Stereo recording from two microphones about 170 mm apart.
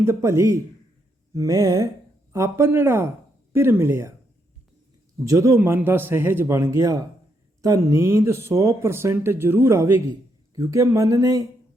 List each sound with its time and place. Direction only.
0.0 s speech: 15° right (ahead or behind)
5.2 s speech: 20° right (ahead or behind)